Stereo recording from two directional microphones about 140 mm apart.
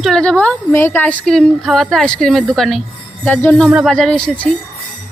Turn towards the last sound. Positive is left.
turn(degrees=5)  # may be behind; listen again after turning